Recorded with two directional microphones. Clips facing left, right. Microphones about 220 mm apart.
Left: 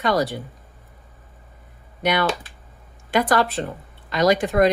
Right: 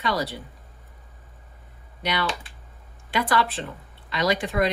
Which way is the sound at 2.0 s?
50° left (ahead or behind).